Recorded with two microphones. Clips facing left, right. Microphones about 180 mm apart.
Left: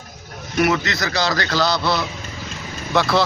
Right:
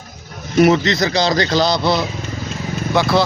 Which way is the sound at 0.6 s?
20° right (ahead or behind).